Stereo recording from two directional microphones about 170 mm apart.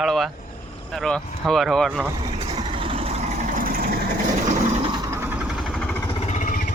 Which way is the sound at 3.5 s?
55° right (ahead or behind).